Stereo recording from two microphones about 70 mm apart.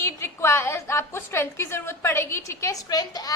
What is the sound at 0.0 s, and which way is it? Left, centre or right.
A woman's voice, left.